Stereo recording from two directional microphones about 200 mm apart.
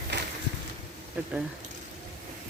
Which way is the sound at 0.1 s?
60° right (ahead or behind).